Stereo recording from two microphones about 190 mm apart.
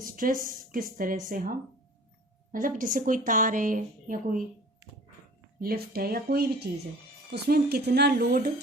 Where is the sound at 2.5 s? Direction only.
45° right (ahead or behind).